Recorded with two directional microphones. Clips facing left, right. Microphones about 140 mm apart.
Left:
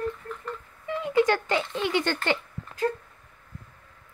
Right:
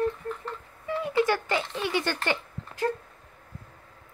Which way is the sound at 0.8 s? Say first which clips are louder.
Right 1 dB; 20° left (ahead or behind).